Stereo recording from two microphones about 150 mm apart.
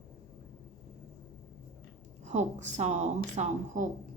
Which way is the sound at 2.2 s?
50° right (ahead or behind).